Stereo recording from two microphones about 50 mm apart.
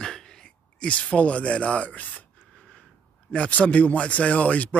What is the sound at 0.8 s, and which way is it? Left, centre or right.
Speech, left.